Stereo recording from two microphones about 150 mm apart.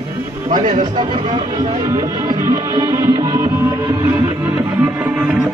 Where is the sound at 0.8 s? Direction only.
30° right (ahead or behind); by 5.4 s 5° right (ahead or behind).